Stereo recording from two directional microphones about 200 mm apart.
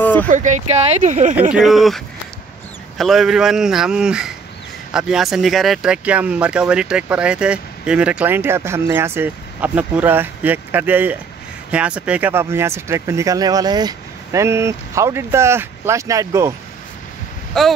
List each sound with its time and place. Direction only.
0.0 s a sound: 10° left (ahead or behind)
0.3 s speech: 40° right (ahead or behind)
1.5 s speech: centre (ahead or behind)
17.6 s speech: centre (ahead or behind)